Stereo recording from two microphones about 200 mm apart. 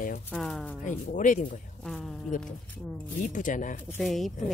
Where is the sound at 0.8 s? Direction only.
40° left (ahead or behind).